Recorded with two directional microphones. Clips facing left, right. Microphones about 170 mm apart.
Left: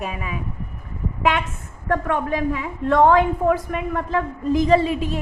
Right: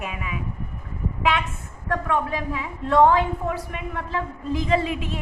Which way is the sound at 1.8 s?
50° left (ahead or behind).